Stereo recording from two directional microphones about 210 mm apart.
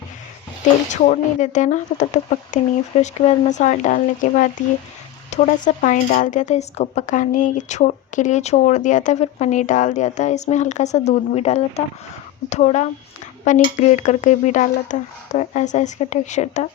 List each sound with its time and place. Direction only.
1.0 s speech: 35° left (ahead or behind)